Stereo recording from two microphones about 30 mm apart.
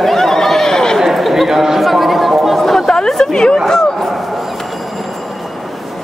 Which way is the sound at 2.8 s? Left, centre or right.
Left.